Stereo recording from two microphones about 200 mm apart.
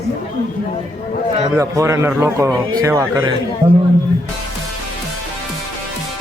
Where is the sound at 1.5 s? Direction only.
15° right (ahead or behind).